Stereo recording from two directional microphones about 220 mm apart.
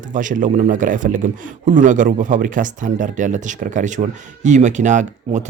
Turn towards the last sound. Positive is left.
turn(degrees=-35)  # may be behind; listen again after turning